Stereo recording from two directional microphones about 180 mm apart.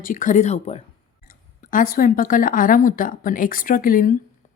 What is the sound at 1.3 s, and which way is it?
Speech, 45° left (ahead or behind).